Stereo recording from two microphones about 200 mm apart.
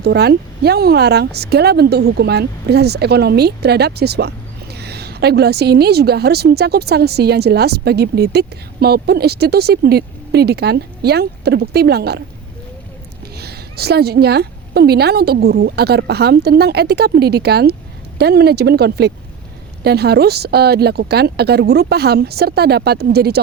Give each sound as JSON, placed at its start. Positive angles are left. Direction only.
{"t": 0.0, "sound": "speech", "side_deg": -55}
{"t": 13.3, "sound": "speech", "side_deg": -55}